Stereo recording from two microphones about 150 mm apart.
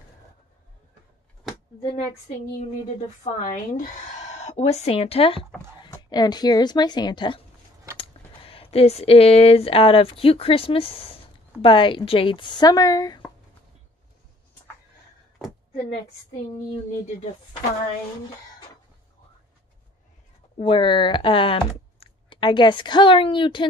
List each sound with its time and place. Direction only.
3.5 s speech: 55° left (ahead or behind); by 5.5 s 40° left (ahead or behind)
5.9 s a woman's voice: 25° left (ahead or behind)
20.5 s speech: 35° left (ahead or behind)